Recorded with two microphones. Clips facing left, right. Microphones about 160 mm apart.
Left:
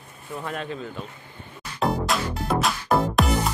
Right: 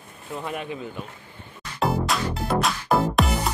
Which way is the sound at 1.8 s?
Centre (ahead or behind).